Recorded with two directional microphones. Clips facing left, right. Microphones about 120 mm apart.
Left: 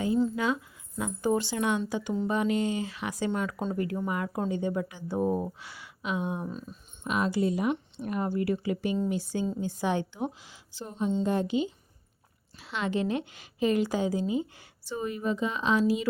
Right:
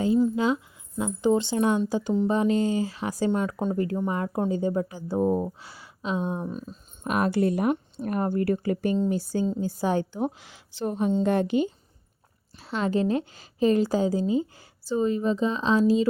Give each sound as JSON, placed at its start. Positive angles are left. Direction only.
{"t": 0.3, "sound": "a woman's voice", "side_deg": -25}
{"t": 3.3, "sound": "a woman's voice", "side_deg": -20}
{"t": 5.2, "sound": "a woman's voice", "side_deg": -25}
{"t": 6.5, "sound": "speech", "side_deg": -20}
{"t": 7.0, "sound": "a woman's voice", "side_deg": -50}
{"t": 10.3, "sound": "speech", "side_deg": -65}
{"t": 12.5, "sound": "a woman's voice", "side_deg": -40}